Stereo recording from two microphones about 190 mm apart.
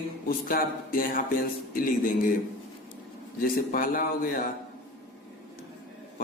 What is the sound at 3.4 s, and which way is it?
A man's voice, 50° left (ahead or behind).